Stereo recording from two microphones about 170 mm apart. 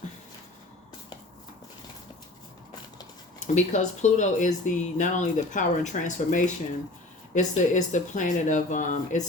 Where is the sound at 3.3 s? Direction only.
45° left (ahead or behind).